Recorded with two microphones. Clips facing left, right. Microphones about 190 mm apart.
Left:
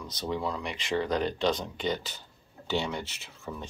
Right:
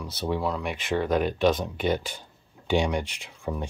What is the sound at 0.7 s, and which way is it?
Speech, 55° right (ahead or behind).